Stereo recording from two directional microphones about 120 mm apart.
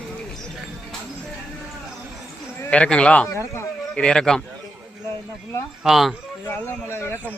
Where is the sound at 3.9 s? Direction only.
5° left (ahead or behind).